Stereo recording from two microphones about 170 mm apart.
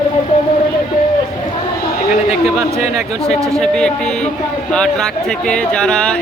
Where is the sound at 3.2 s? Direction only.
5° left (ahead or behind).